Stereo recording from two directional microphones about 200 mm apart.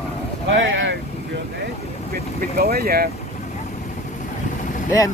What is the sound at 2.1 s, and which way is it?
Speech, 50° right (ahead or behind).